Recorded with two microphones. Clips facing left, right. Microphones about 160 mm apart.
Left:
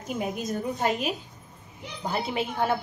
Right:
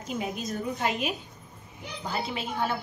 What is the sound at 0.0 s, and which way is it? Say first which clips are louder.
A woman's voice: left 2 dB; 55° left (ahead or behind).